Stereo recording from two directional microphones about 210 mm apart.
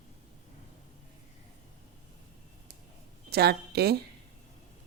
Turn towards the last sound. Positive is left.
turn(degrees=-50)  # may be behind; listen again after turning